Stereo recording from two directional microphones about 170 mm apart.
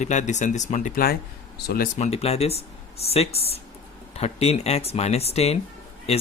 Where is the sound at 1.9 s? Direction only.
40° left (ahead or behind).